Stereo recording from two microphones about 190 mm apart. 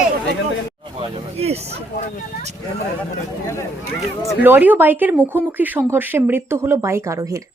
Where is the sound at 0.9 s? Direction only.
30° right (ahead or behind).